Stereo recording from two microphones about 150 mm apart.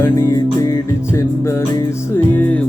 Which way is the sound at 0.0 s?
15° left (ahead or behind).